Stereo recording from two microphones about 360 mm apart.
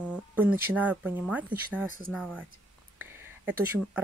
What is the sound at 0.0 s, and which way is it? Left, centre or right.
Speech, centre.